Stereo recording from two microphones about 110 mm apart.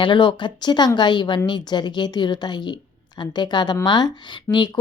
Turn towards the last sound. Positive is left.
turn(degrees=45)  # may be behind; listen again after turning